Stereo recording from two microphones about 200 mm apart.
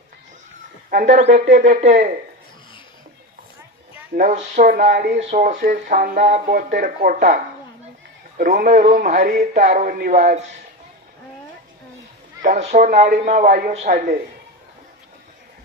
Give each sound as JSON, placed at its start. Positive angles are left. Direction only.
{"t": 0.9, "sound": "speech", "side_deg": -40}
{"t": 4.1, "sound": "speech", "side_deg": -40}
{"t": 8.4, "sound": "speech", "side_deg": -45}
{"t": 12.4, "sound": "speech", "side_deg": -40}